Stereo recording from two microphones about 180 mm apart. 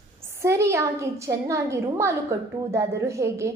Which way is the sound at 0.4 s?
15° right (ahead or behind).